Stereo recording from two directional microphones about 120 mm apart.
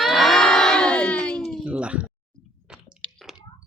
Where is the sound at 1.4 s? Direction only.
5° left (ahead or behind).